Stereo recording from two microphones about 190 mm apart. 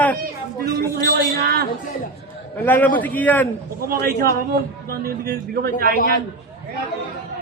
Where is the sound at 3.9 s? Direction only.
55° right (ahead or behind).